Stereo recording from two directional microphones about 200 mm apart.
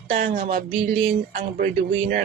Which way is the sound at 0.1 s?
40° right (ahead or behind).